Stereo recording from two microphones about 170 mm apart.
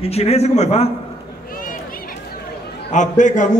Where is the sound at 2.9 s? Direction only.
45° left (ahead or behind).